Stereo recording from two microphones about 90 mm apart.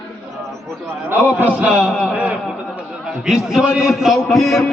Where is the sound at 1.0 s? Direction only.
20° right (ahead or behind).